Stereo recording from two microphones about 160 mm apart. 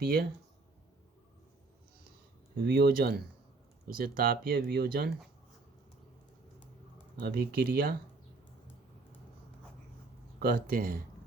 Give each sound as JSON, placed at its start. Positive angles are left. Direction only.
{"t": 0.0, "sound": "speech", "side_deg": -70}
{"t": 2.6, "sound": "speech", "side_deg": -80}
{"t": 3.9, "sound": "speech", "side_deg": -65}
{"t": 7.2, "sound": "speech", "side_deg": -80}
{"t": 10.4, "sound": "speech", "side_deg": -70}